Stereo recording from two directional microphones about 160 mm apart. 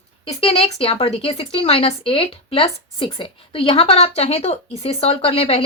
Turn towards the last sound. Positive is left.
turn(degrees=40)  # may be behind; listen again after turning